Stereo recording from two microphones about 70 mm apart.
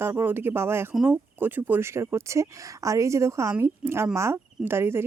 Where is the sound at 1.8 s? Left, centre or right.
Right.